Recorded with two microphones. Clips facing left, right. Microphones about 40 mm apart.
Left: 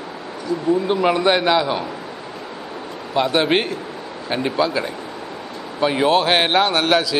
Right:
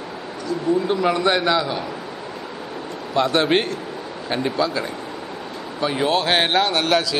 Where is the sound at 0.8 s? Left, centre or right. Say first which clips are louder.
Left 2 dB; centre.